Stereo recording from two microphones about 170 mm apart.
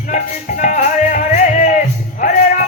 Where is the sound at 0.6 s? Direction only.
45° left (ahead or behind).